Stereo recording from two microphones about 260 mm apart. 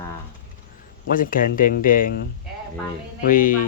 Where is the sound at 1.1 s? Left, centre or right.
Left.